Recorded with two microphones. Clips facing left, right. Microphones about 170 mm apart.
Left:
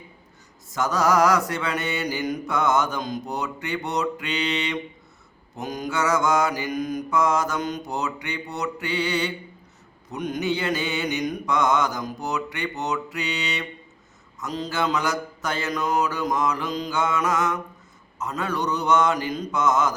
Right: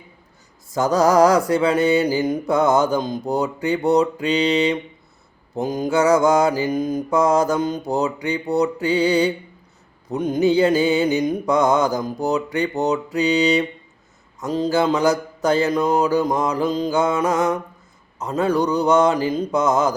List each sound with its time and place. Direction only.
0.7 s mantra: 35° right (ahead or behind)